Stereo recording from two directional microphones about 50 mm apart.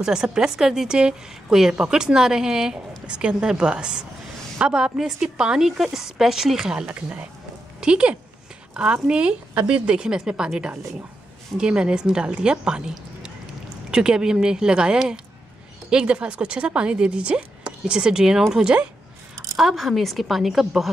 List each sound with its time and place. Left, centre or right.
0.0 s a woman's voice: centre
5.7 s a woman's voice: centre
6.9 s a woman's voice: right
19.5 s a woman's voice: centre